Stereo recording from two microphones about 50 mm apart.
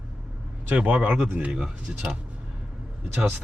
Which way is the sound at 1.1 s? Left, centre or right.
Right.